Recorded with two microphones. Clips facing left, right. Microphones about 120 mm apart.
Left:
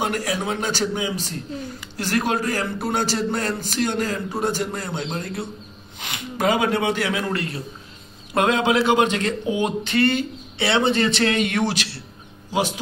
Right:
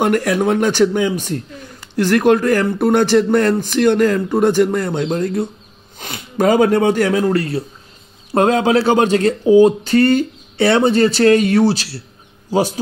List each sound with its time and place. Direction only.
0.0 s a man's voice: 55° right (ahead or behind); by 12.0 s 35° right (ahead or behind)